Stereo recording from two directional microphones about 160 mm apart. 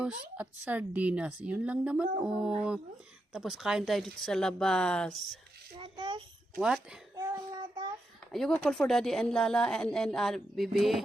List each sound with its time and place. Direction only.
0.0 s a woman's voice: 10° right (ahead or behind)
5.7 s a sound: 30° right (ahead or behind)
6.6 s speech: 5° right (ahead or behind)
7.2 s child singing: 25° right (ahead or behind)
8.3 s speech: centre (ahead or behind)